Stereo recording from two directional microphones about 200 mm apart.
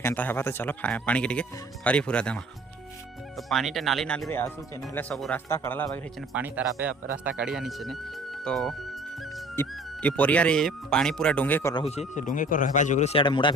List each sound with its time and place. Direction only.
0.0 s speech: 10° left (ahead or behind)
6.3 s speech: 5° right (ahead or behind); by 11.7 s 10° left (ahead or behind)
11.7 s speech: 30° left (ahead or behind)